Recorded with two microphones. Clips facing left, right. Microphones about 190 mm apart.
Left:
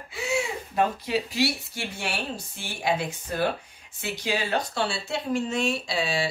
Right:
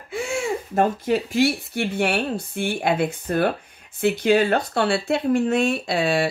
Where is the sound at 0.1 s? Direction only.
50° right (ahead or behind).